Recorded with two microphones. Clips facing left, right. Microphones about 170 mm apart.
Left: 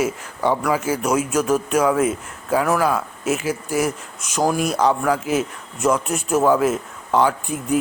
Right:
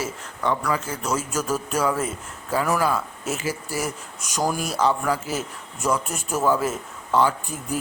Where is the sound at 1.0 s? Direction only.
10° left (ahead or behind).